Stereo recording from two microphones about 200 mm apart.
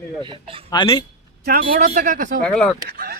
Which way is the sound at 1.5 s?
50° right (ahead or behind).